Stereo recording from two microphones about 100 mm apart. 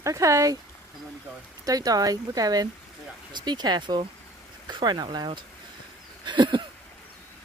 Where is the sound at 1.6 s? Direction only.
40° right (ahead or behind).